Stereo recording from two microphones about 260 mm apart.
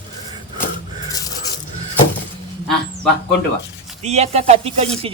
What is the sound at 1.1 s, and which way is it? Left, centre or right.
Coin, centre.